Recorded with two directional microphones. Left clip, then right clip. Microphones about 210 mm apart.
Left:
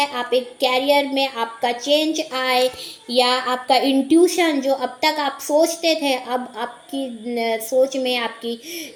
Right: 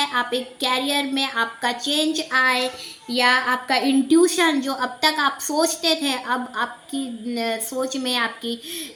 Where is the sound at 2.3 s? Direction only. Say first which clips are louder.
Even; 10° right (ahead or behind).